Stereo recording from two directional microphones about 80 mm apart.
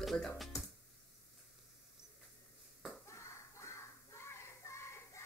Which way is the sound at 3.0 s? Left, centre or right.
Left.